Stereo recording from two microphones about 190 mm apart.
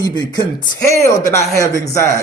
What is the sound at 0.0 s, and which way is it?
A man's voice, 20° left (ahead or behind).